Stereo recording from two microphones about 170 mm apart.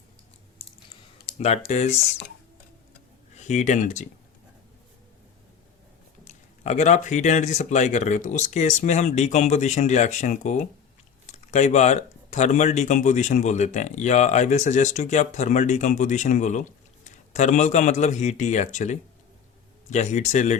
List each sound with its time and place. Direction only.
0.6 s a sound: 30° left (ahead or behind)
1.4 s speech: 40° left (ahead or behind)
3.3 s speech: 45° left (ahead or behind)
6.2 s speech: 45° left (ahead or behind)